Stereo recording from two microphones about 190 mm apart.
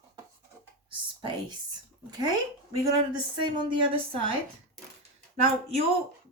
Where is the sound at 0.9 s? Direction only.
25° right (ahead or behind).